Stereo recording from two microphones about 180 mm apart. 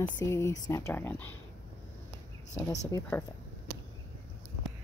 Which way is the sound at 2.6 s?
20° left (ahead or behind).